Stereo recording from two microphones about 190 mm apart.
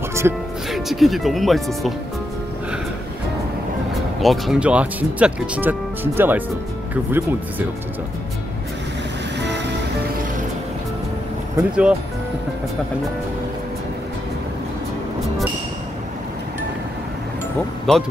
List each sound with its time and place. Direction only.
0.2 s speech: 15° right (ahead or behind)
0.7 s speech: centre (ahead or behind)
4.2 s speech: centre (ahead or behind)
9.4 s music: 65° right (ahead or behind)
11.5 s speech: 5° right (ahead or behind)